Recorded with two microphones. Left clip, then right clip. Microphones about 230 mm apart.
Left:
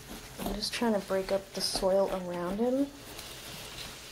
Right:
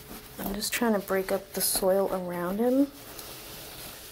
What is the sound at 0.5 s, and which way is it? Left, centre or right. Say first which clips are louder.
Speech: right 3 dB; right.